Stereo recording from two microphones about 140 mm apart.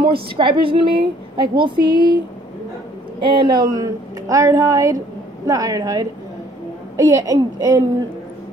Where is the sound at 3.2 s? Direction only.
35° right (ahead or behind).